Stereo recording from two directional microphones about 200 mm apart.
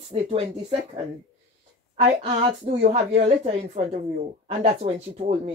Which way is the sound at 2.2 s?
25° right (ahead or behind).